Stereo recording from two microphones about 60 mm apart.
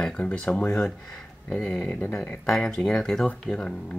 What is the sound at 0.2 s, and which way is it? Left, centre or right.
Speech, centre.